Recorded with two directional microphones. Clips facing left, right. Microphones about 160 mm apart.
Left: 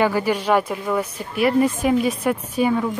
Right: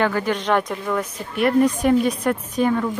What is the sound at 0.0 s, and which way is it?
Speech, 10° left (ahead or behind).